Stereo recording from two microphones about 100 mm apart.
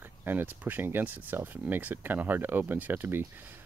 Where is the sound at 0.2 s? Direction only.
20° right (ahead or behind).